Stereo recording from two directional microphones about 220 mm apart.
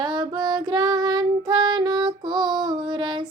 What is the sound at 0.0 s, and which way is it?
Child singing, 20° right (ahead or behind).